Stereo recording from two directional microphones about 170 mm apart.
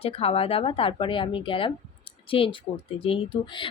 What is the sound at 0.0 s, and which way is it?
Speech, 35° left (ahead or behind).